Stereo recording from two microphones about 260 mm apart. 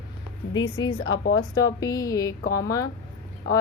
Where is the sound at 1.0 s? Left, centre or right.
Left.